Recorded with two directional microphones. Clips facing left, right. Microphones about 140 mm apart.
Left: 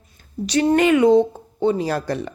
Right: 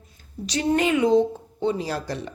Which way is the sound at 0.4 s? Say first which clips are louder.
Left 6 dB; 60° left (ahead or behind).